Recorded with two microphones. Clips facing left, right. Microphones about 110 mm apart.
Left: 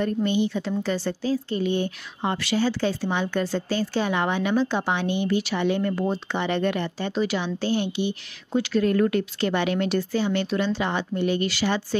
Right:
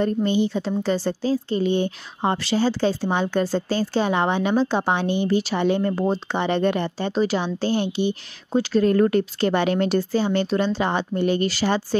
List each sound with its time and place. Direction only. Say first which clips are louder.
0.0 s speech: right 3 dB; 30° right (ahead or behind)